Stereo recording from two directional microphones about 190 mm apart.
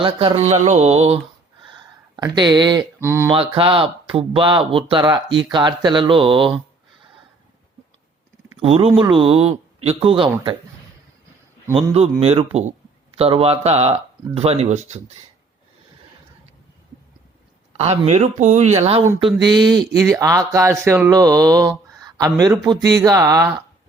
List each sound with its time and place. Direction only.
0.0 s speech: 30° right (ahead or behind)
2.2 s speech: 25° right (ahead or behind)
3.2 s speech: 25° right (ahead or behind)
8.6 s speech: 30° right (ahead or behind)
12.2 s speech: 30° right (ahead or behind)
17.7 s speech: 35° right (ahead or behind)
19.2 s speech: 25° right (ahead or behind)